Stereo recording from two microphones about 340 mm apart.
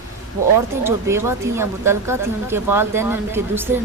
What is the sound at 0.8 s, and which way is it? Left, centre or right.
Speech, centre.